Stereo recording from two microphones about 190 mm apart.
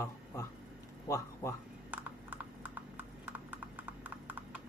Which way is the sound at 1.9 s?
10° right (ahead or behind).